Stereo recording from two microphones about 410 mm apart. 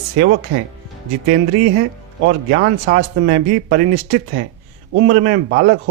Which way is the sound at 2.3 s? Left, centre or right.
Right.